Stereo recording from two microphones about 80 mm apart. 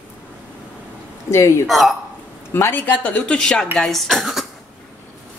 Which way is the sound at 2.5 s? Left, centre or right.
Left.